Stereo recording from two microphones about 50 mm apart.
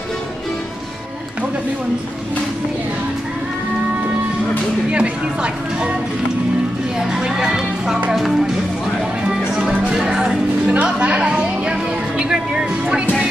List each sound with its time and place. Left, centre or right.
4.9 s speech: right
7.0 s speech: centre
9.6 s music: right
9.9 s speech: centre
10.7 s speech: right